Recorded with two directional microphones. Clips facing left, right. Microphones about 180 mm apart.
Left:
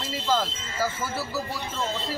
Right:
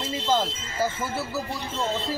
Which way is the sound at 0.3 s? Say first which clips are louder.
Right 1 dB; 20° right (ahead or behind).